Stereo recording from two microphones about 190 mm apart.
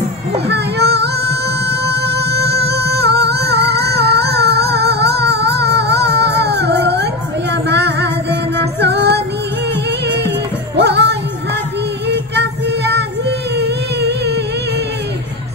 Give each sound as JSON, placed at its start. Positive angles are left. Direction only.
{"t": 0.5, "sound": "music", "side_deg": -60}
{"t": 12.1, "sound": "child singing", "side_deg": -65}
{"t": 13.6, "sound": "a sound", "side_deg": -60}